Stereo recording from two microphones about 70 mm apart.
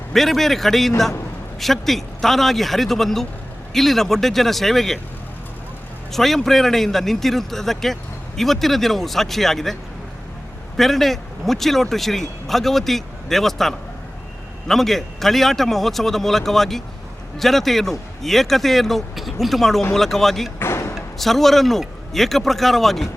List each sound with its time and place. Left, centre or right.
0.1 s speech: centre
6.1 s speech: centre
10.8 s speech: centre
20.6 s a sound: left
20.9 s speech: centre